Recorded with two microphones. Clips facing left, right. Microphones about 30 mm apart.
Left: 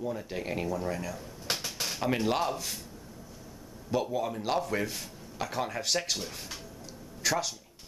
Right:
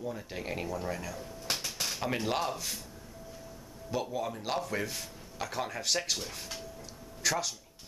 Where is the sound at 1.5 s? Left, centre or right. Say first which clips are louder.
Left 1 dB; centre.